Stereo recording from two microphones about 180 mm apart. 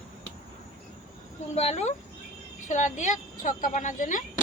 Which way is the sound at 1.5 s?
35° left (ahead or behind).